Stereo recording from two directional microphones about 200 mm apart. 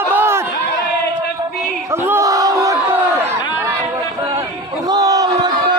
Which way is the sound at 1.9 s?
10° right (ahead or behind).